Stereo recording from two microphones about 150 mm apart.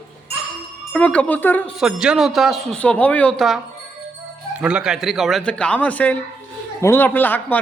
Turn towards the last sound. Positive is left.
turn(degrees=10)  # may be behind; listen again after turning